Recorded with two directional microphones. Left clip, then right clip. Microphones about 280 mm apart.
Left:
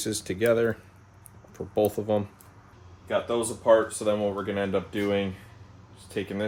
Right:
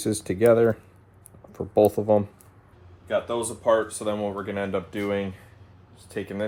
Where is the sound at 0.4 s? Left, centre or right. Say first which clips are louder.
Right 5 dB; centre.